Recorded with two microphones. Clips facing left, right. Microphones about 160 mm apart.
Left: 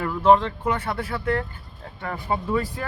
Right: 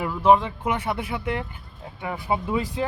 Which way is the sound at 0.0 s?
10° right (ahead or behind).